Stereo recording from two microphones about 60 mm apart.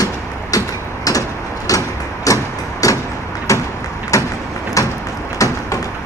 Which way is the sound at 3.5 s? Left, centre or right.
Left.